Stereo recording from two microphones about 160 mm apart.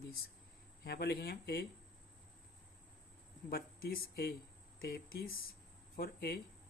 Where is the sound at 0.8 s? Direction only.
85° left.